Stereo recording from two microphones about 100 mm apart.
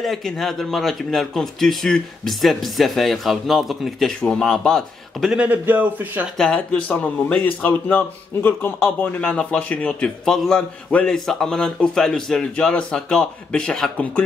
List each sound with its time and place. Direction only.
0.0 s a man's voice: centre (ahead or behind)
5.3 s a man's voice: 15° right (ahead or behind)
6.3 s a man's voice: 5° left (ahead or behind)